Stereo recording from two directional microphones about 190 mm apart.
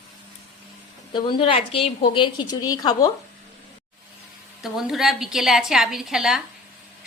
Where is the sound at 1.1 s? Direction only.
25° left (ahead or behind).